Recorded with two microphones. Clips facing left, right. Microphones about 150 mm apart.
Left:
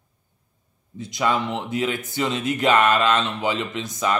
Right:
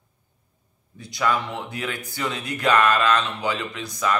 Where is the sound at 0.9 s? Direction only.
20° left (ahead or behind).